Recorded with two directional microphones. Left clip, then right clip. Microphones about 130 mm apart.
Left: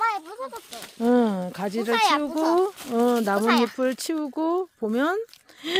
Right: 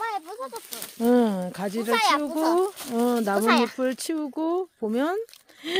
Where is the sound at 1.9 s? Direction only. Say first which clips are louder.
Left 1 dB; 80° right.